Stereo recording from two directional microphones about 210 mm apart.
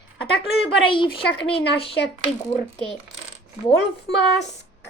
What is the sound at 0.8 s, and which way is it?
A woman's voice, 25° left (ahead or behind).